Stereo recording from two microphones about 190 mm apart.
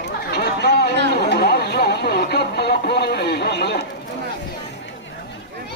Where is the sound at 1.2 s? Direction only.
55° left (ahead or behind).